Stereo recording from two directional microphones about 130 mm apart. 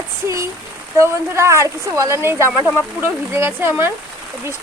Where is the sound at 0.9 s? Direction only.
20° right (ahead or behind).